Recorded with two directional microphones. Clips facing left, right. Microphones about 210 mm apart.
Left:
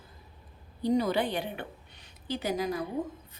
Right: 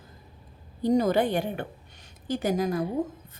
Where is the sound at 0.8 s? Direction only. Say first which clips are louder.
Right 4 dB; 45° right (ahead or behind).